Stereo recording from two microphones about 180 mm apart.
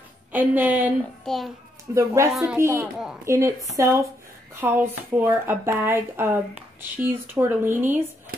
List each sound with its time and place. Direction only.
0.3 s speech: 10° right (ahead or behind)
1.2 s a child's voice: centre (ahead or behind)
2.0 s a woman's voice: 15° right (ahead or behind)